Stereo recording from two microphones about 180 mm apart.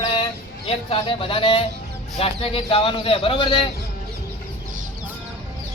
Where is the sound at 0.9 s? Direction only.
30° left (ahead or behind).